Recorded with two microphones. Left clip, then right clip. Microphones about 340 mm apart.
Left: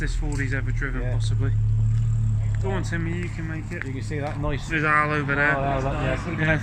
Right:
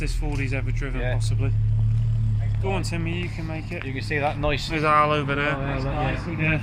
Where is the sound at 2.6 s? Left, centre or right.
Centre.